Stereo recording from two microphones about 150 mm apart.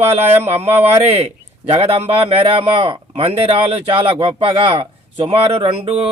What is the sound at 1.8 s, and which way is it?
Speech, 40° right (ahead or behind).